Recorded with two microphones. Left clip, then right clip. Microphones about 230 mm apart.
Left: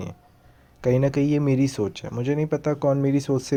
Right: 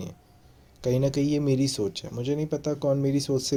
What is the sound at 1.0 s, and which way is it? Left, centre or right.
Speech, left.